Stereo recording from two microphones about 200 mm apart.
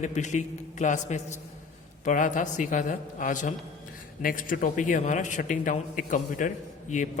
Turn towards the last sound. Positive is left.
turn(degrees=35)  # may be behind; listen again after turning